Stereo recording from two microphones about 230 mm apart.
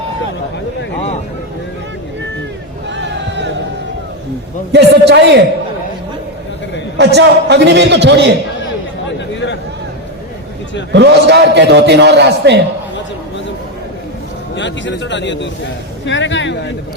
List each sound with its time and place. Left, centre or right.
2.9 s a sound: right
4.7 s a man's voice: right
7.0 s a man's voice: right
9.3 s a sound: left
10.9 s a man's voice: right
14.5 s a man's voice: left